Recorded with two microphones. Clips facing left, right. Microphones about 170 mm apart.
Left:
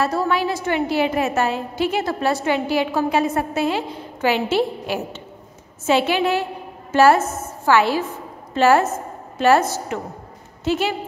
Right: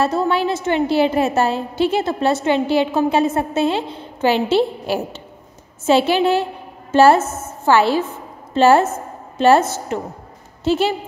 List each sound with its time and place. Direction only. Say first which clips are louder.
0.0 s a woman's voice: right 2 dB; 25° right (ahead or behind)